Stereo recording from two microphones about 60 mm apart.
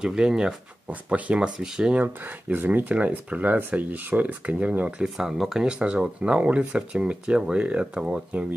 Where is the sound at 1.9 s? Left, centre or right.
Right.